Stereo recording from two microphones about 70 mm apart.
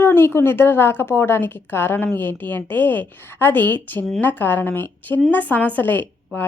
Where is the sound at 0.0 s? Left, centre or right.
Left.